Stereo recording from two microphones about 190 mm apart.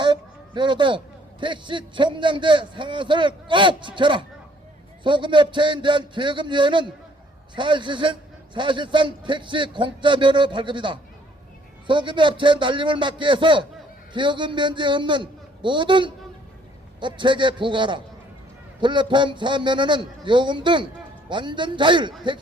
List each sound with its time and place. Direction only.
0.0 s a man's voice: 25° right (ahead or behind)